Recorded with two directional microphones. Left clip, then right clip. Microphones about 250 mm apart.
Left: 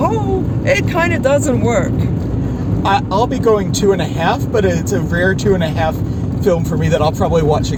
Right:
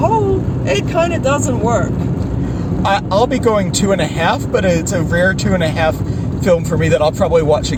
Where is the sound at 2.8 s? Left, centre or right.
Right.